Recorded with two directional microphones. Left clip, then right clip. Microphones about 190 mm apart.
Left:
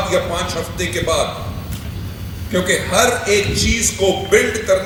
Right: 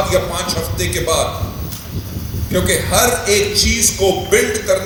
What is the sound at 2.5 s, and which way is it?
A man's voice, 50° right (ahead or behind).